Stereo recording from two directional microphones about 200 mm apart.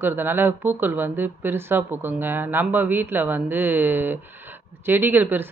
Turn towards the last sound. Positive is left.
turn(degrees=-10)  # may be behind; listen again after turning